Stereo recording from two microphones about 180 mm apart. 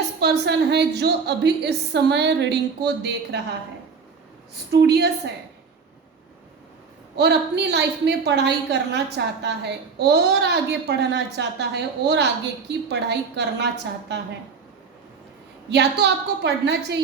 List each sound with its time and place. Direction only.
0.2 s a woman's voice: 65° right (ahead or behind)
4.5 s a woman's voice: 65° right (ahead or behind)
7.2 s a woman's voice: 70° right (ahead or behind)
15.7 s a woman's voice: 70° right (ahead or behind)